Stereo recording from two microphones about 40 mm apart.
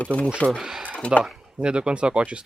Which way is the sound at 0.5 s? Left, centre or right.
Centre.